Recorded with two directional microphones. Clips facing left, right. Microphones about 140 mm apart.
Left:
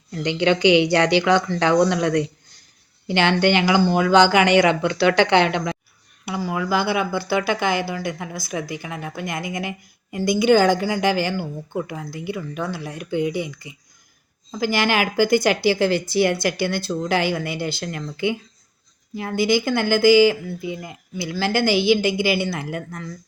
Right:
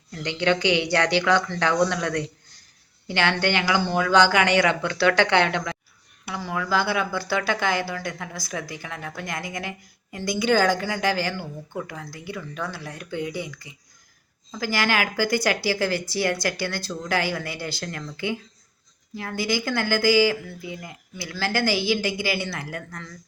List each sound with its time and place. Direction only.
0.1 s a woman's voice: 15° left (ahead or behind)